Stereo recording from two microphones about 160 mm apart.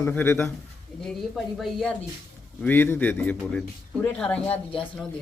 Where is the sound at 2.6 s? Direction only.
15° left (ahead or behind).